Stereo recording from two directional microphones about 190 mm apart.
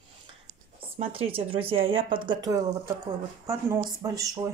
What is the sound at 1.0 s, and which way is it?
Speech, 30° right (ahead or behind).